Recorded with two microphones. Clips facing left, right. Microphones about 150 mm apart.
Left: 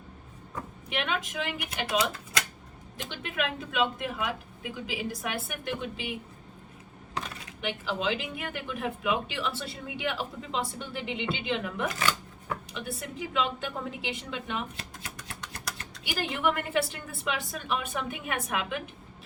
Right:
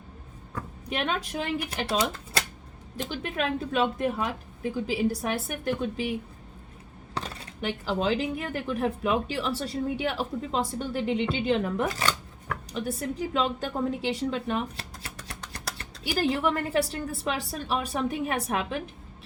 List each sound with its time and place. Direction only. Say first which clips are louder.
0.9 s speech: right 2 dB; 40° right (ahead or behind)
16.0 s speech: right 4 dB; 35° right (ahead or behind)